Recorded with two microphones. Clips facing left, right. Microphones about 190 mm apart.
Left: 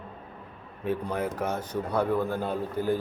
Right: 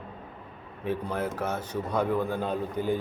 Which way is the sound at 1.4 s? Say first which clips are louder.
Left 1 dB; 10° left (ahead or behind).